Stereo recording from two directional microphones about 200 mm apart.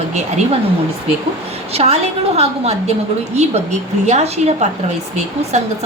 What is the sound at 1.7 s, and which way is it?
A woman's voice, 30° right (ahead or behind).